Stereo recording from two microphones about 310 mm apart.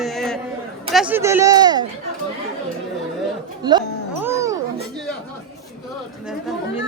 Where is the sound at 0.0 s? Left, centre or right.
Centre.